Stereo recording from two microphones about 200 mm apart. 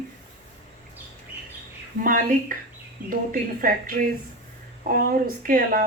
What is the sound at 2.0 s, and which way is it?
A woman's voice, 40° right (ahead or behind).